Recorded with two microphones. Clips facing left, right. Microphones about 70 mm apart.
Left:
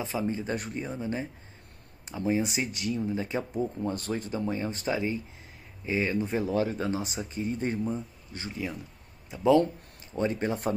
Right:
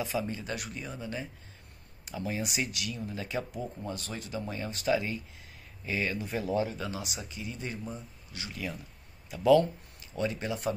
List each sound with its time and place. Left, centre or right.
0.0 s speech: left
3.8 s a man's voice: left